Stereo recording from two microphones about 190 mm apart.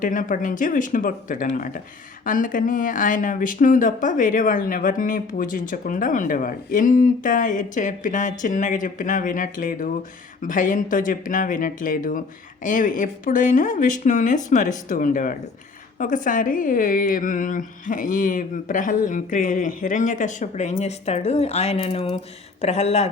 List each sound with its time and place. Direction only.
0.0 s speech: 45° left (ahead or behind)